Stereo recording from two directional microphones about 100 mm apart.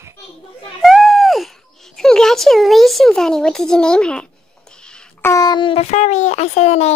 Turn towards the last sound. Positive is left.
turn(degrees=90)